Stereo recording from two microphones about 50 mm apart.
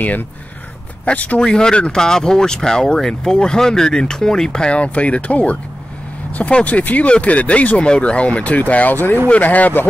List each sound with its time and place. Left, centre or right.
1.0 s speech: left
1.4 s speech: centre
6.6 s speech: left
8.9 s speech: left
9.3 s speech: left